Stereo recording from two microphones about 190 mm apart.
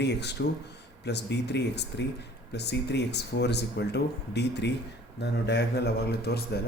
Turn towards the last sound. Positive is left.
turn(degrees=55)  # may be behind; listen again after turning